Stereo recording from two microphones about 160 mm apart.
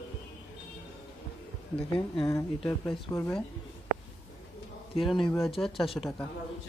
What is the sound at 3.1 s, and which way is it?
Speech, 10° left (ahead or behind).